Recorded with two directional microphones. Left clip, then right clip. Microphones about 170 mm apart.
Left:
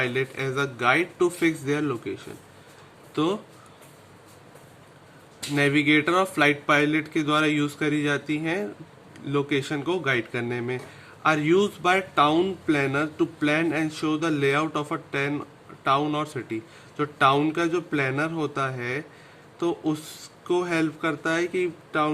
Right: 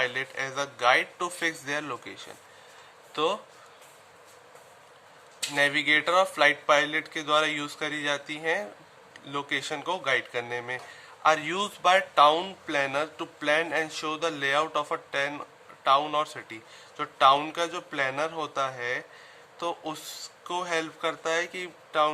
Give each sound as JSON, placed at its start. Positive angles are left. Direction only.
{"t": 0.0, "sound": "speech", "side_deg": -15}
{"t": 5.5, "sound": "speech", "side_deg": -10}